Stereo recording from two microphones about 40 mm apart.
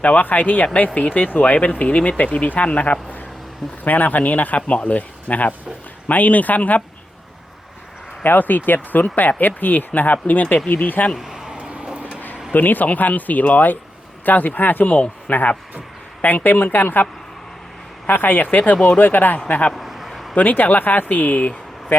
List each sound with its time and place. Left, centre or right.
0.0 s speech: left
0.3 s speech: left
0.6 s speech: left
8.2 s speech: left
11.2 s a sound: centre
11.5 s vehicle: right
12.5 s speech: left
15.3 s speech: left
19.7 s a sound: centre
20.3 s speech: left